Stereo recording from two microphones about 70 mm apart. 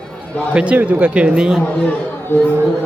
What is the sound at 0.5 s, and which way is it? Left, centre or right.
Speech, centre.